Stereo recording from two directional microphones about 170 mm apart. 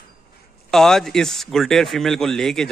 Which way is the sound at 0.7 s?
Centre (ahead or behind).